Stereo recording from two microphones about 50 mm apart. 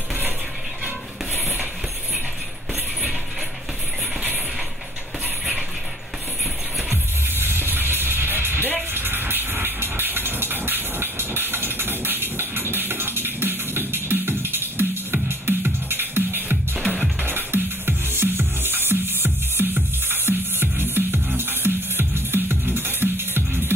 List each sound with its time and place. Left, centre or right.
6.9 s music: right
8.9 s vehicle: right
17.2 s music: right